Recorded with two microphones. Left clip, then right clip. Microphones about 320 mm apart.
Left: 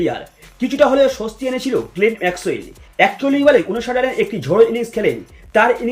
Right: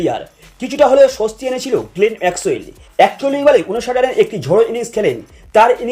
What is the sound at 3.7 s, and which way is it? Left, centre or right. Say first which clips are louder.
A man's voice: right 4 dB; centre.